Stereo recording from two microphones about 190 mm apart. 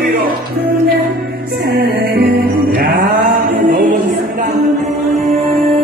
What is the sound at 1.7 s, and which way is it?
Music, 55° right (ahead or behind).